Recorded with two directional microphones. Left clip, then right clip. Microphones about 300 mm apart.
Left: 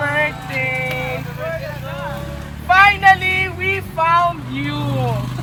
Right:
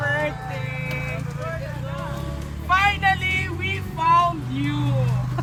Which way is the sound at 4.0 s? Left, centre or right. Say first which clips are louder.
Left 3 dB; centre.